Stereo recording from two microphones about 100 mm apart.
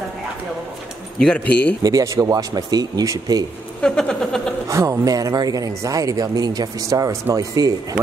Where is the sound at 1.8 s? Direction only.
35° right (ahead or behind).